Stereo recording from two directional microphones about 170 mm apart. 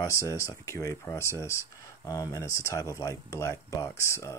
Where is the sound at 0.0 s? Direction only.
20° left (ahead or behind).